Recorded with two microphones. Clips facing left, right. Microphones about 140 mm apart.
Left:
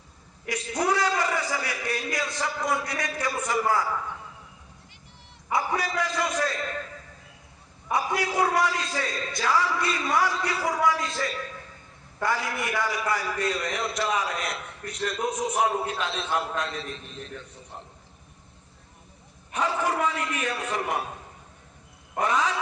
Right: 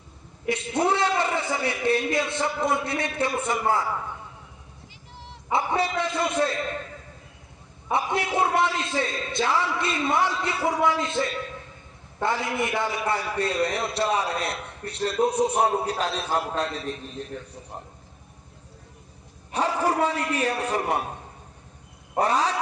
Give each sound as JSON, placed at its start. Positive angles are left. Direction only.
{"t": 0.4, "sound": "a man's voice", "side_deg": -25}
{"t": 5.1, "sound": "dog", "side_deg": -90}
{"t": 5.5, "sound": "a man's voice", "side_deg": -25}
{"t": 7.9, "sound": "a man's voice", "side_deg": -25}
{"t": 19.5, "sound": "a man's voice", "side_deg": -30}
{"t": 22.2, "sound": "a man's voice", "side_deg": -35}